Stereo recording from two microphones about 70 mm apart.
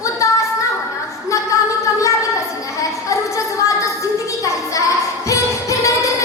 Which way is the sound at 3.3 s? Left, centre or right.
Left.